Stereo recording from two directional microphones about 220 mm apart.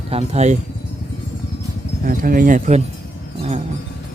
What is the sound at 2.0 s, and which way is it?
Speech, 40° right (ahead or behind).